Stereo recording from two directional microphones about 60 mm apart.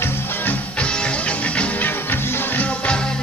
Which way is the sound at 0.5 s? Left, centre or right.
Centre.